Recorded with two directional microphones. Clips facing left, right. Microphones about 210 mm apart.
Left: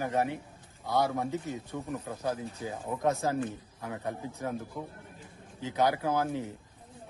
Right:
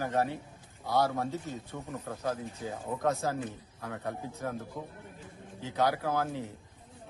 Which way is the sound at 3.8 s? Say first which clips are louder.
Left 1 dB; 15° left (ahead or behind).